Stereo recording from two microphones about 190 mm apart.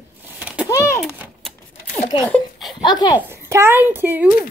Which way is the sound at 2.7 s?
25° left (ahead or behind).